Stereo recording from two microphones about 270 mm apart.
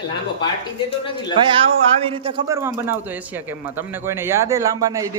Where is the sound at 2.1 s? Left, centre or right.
Centre.